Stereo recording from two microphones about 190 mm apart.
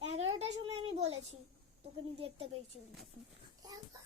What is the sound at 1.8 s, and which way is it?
Speech, 30° right (ahead or behind).